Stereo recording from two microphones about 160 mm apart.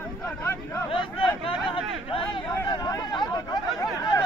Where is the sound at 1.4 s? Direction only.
35° left (ahead or behind).